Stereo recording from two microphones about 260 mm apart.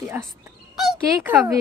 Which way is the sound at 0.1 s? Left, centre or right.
Centre.